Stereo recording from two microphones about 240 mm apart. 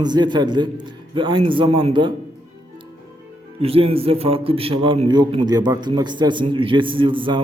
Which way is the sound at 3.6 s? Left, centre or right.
Right.